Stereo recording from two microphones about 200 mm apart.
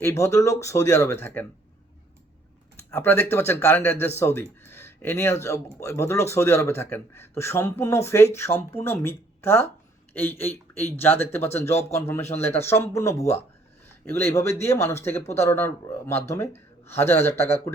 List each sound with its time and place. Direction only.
0.0 s a man's voice: 15° left (ahead or behind)
2.9 s a man's voice: 10° left (ahead or behind)
11.7 s a man's voice: 30° left (ahead or behind)
11.9 s a man's voice: 10° left (ahead or behind)